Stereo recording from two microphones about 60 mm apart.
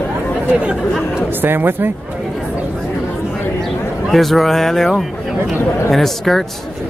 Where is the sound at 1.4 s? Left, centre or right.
Right.